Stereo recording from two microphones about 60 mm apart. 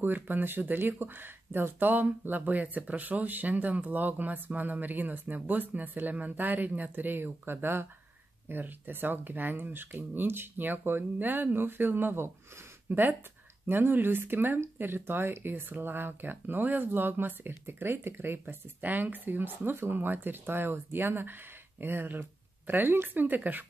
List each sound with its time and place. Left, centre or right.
0.0 s speech: right